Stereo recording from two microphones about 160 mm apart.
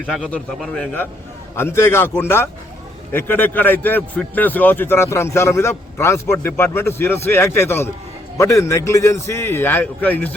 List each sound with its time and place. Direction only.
0.0 s a man's voice: 10° left (ahead or behind)